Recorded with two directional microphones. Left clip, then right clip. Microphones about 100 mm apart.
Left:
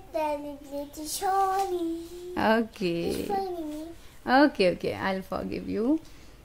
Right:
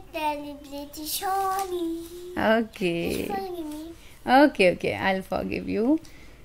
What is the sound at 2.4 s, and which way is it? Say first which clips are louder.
A woman's voice: right 2 dB; 5° left (ahead or behind).